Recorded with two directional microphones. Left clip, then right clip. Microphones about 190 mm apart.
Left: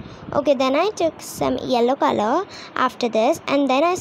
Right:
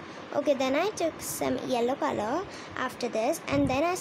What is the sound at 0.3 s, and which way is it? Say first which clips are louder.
A woman's voice: left 8 dB; 35° left (ahead or behind).